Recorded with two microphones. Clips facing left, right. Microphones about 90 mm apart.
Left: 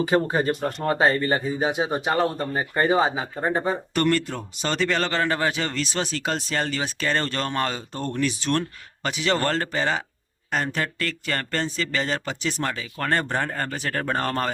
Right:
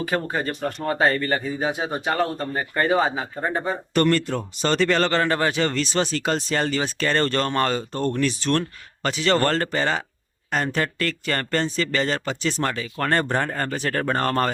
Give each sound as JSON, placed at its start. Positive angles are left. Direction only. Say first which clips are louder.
{"t": 0.0, "sound": "speech", "louder": "left 3 dB", "side_deg": 20}